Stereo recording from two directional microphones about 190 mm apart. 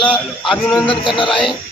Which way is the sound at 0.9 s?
25° left (ahead or behind).